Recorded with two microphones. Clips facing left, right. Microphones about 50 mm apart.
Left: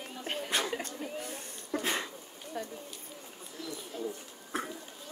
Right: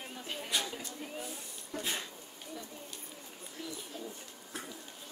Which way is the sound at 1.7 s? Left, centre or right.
Left.